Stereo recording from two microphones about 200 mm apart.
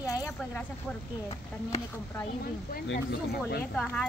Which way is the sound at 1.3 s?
30° left (ahead or behind).